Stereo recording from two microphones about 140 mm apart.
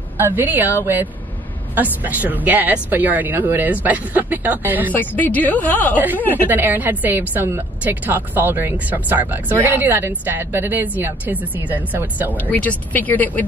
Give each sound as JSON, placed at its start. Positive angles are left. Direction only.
{"t": 0.4, "sound": "a woman's voice", "side_deg": -15}
{"t": 1.8, "sound": "a woman's voice", "side_deg": -10}
{"t": 4.9, "sound": "speech", "side_deg": 10}
{"t": 6.4, "sound": "a woman's voice", "side_deg": -15}
{"t": 12.4, "sound": "speech", "side_deg": 10}